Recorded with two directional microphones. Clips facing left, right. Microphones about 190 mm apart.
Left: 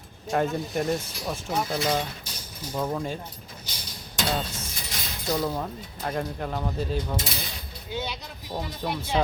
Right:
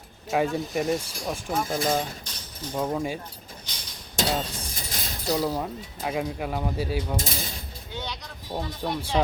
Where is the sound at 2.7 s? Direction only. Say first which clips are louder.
Right 1 dB; 10° right (ahead or behind).